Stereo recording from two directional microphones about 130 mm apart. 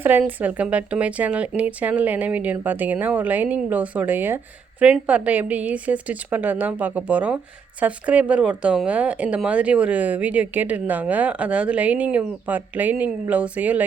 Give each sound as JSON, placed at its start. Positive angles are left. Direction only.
{"t": 0.0, "sound": "speech", "side_deg": -15}